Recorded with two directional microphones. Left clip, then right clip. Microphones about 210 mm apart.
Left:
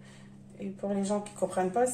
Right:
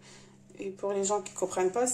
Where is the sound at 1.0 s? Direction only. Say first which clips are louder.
Right 1 dB; 50° right (ahead or behind).